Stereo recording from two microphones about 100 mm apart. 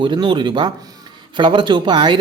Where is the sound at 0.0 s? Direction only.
55° right (ahead or behind).